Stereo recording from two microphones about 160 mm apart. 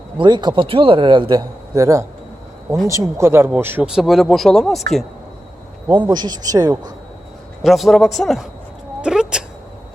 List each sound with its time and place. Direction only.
0.2 s a man's voice: 30° right (ahead or behind); by 4.8 s 5° left (ahead or behind)
5.9 s a man's voice: 25° right (ahead or behind)
7.6 s speech: centre (ahead or behind)